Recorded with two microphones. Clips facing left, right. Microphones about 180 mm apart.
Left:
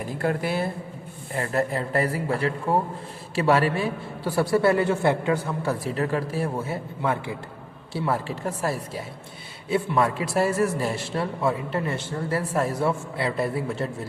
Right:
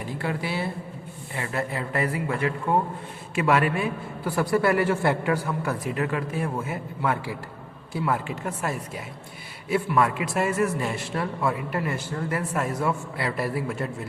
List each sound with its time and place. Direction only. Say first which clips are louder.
0.2 s a man's voice: left 4 dB; 50° left (ahead or behind); by 14.1 s 30° left (ahead or behind)